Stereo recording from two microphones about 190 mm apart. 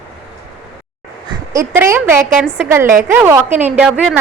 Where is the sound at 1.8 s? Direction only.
10° right (ahead or behind).